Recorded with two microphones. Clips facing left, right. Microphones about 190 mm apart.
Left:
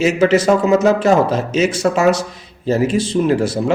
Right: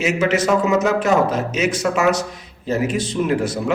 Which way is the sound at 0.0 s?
30° left (ahead or behind).